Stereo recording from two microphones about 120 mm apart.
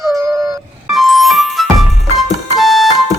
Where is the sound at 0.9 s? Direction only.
Centre (ahead or behind).